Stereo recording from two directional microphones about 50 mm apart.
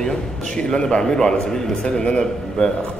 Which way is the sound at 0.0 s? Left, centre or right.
Centre.